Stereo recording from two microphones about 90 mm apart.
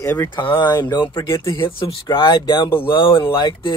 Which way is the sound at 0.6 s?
50° left (ahead or behind).